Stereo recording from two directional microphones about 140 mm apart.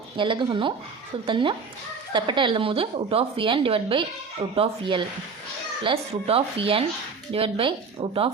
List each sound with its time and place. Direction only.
0.2 s a woman's voice: 35° right (ahead or behind)